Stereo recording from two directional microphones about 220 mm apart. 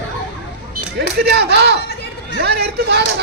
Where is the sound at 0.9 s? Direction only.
45° right (ahead or behind).